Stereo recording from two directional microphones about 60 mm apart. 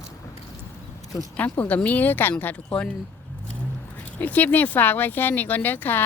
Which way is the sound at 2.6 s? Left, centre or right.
Centre.